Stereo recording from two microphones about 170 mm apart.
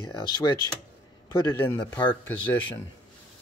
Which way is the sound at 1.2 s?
25° left (ahead or behind).